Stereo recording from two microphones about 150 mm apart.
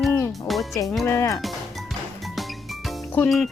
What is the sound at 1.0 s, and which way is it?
Speech, 20° left (ahead or behind).